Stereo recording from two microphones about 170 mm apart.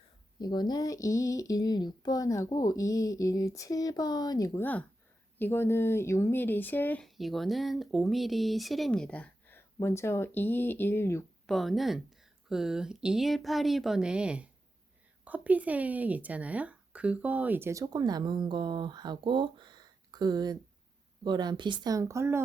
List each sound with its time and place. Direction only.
0.3 s speech: 25° left (ahead or behind)
11.4 s speech: centre (ahead or behind); by 22.4 s 15° right (ahead or behind)